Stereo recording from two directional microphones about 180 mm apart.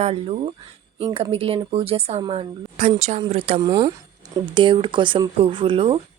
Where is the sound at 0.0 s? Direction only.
30° right (ahead or behind).